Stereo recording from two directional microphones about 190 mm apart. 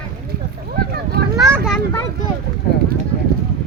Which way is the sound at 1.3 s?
15° right (ahead or behind).